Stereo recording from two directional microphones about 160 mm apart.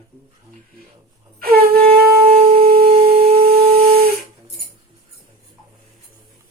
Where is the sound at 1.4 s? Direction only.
70° right (ahead or behind).